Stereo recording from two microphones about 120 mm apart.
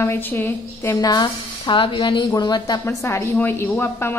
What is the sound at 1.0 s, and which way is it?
Speech, 35° left (ahead or behind).